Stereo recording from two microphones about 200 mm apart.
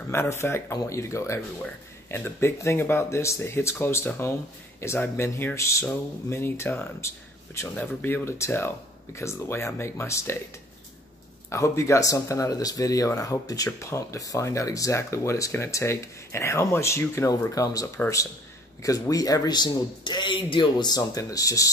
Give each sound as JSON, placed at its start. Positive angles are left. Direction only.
{"t": 0.1, "sound": "speech", "side_deg": 15}
{"t": 11.5, "sound": "speech", "side_deg": 15}